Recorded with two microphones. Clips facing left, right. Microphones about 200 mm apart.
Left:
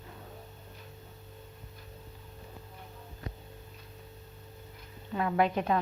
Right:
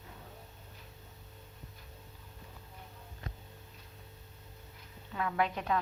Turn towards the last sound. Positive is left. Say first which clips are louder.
# left 5 dB
turn(degrees=30)  # may be behind; listen again after turning